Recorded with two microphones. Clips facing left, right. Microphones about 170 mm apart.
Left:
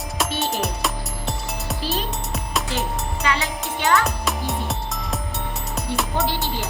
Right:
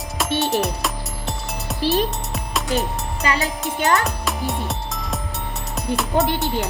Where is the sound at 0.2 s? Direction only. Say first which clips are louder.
Right 4 dB; centre (ahead or behind).